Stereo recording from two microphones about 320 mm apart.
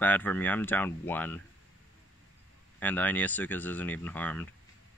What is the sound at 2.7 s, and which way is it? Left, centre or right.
Speech, centre.